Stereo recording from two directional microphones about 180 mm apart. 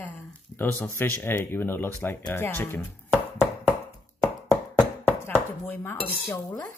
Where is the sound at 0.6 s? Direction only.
10° left (ahead or behind).